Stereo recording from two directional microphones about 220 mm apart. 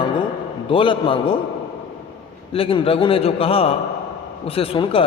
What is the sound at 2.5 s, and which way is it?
A man's voice, 25° left (ahead or behind).